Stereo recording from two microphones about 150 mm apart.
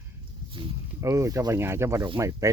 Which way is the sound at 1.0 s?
20° right (ahead or behind).